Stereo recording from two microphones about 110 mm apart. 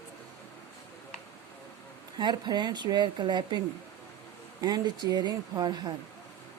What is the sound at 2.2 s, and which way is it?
Speech, 40° right (ahead or behind).